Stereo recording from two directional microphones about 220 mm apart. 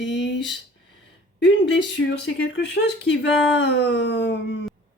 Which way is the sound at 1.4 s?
55° left (ahead or behind).